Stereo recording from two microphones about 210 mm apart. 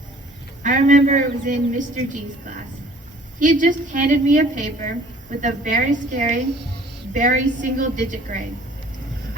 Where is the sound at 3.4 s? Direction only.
40° right (ahead or behind).